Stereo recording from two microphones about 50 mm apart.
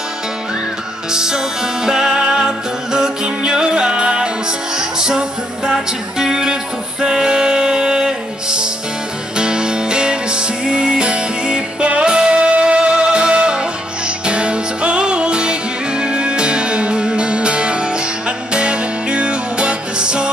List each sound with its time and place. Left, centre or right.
1.1 s music: centre